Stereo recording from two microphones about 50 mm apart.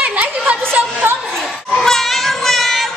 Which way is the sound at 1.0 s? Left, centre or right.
Right.